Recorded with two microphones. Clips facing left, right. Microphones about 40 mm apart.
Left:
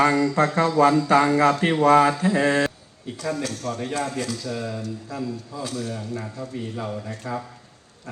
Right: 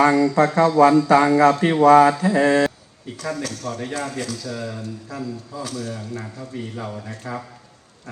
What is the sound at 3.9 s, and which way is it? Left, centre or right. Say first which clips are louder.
Speech: even; left.